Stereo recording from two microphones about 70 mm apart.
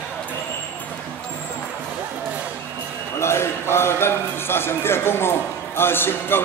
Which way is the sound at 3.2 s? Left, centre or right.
Left.